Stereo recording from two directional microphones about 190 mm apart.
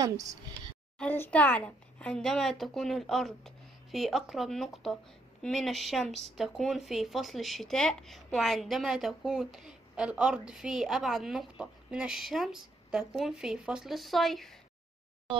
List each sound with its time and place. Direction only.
0.0 s speech: 20° right (ahead or behind)
0.9 s speech: 10° left (ahead or behind)